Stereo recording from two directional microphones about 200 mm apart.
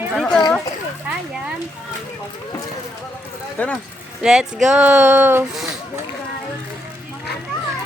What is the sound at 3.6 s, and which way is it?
Speech, 5° left (ahead or behind).